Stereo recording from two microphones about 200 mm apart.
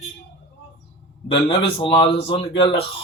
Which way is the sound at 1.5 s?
25° left (ahead or behind).